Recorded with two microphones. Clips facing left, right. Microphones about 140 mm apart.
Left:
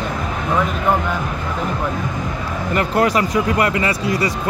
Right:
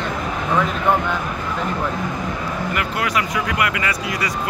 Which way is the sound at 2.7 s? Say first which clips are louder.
Left 8 dB; 35° left (ahead or behind).